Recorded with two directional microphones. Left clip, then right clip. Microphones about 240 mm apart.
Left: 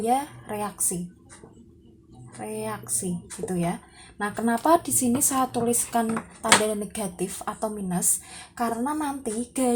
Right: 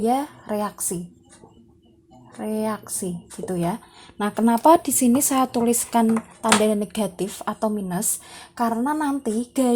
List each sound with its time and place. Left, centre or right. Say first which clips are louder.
0.0 s speech: right 2 dB; right
2.4 s speech: right 6 dB; right